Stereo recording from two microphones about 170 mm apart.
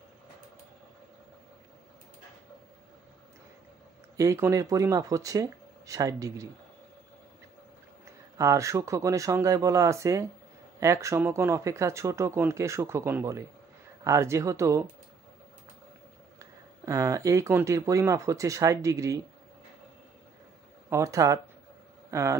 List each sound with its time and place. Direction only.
4.2 s speech: 20° right (ahead or behind)
8.4 s speech: 20° right (ahead or behind)
16.3 s speech: 15° right (ahead or behind)
20.9 s a man's voice: 20° right (ahead or behind)